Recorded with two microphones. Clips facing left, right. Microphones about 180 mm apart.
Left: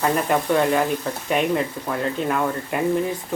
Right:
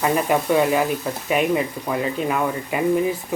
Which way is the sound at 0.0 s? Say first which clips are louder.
Right 1 dB; 5° right (ahead or behind).